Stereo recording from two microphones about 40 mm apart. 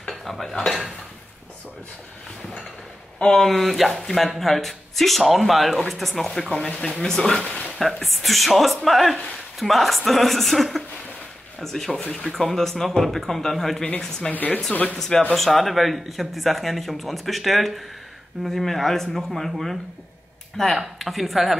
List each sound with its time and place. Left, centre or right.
0.1 s dishes: centre
3.2 s speech: left
3.4 s speech: centre
7.0 s speech: centre
7.8 s speech: centre
11.9 s speech: left
12.4 s speech: centre
14.3 s speech: left
15.0 s speech: centre